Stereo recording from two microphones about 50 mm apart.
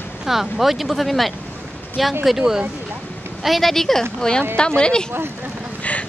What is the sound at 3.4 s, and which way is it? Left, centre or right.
Speech, centre.